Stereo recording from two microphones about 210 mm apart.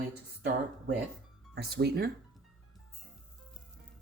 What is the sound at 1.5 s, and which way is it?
Speech, 50° right (ahead or behind).